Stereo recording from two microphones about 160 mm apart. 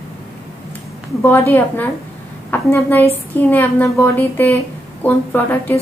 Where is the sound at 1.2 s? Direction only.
10° left (ahead or behind).